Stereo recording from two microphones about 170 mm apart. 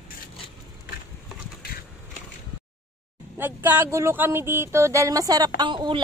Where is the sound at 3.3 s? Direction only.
10° right (ahead or behind).